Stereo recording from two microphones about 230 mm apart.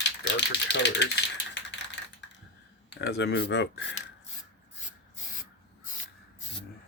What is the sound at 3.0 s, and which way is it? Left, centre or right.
Speech, left.